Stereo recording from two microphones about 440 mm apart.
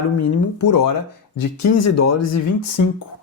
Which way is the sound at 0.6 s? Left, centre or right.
Left.